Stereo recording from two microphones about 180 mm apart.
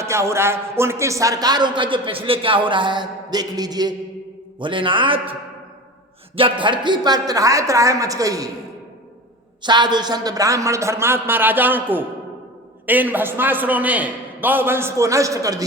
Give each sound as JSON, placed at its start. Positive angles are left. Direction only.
{"t": 0.0, "sound": "a man's voice", "side_deg": -15}
{"t": 9.6, "sound": "a man's voice", "side_deg": -25}